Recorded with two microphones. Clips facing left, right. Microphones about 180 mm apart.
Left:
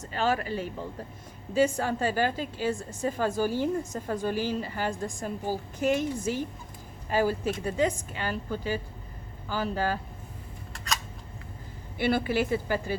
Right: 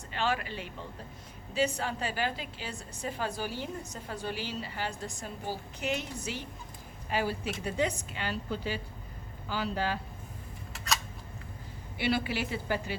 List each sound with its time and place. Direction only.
0.0 s a woman's voice: 45° left (ahead or behind)
10.7 s a sound: 5° right (ahead or behind)
11.9 s a woman's voice: 50° left (ahead or behind)